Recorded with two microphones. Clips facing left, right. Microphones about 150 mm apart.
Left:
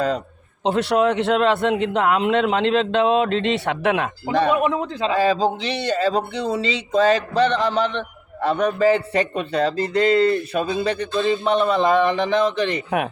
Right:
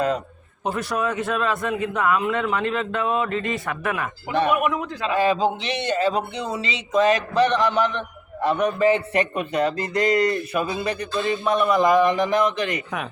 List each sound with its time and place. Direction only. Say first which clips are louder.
0.8 s a man's voice: left 7 dB; 70° left (ahead or behind)
4.3 s speech: left 2 dB; 30° left (ahead or behind)